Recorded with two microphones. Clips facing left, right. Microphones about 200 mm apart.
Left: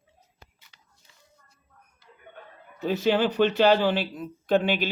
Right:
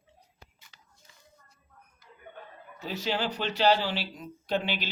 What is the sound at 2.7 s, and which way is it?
Speech, 55° left (ahead or behind).